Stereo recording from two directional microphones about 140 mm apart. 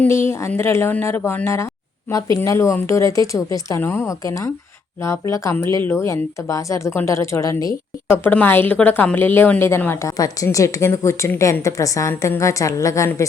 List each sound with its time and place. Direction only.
0.0 s a woman's voice: 20° left (ahead or behind)
8.2 s a woman's voice: 10° left (ahead or behind)